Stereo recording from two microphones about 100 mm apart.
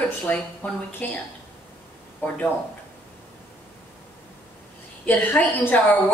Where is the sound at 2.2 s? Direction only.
20° left (ahead or behind).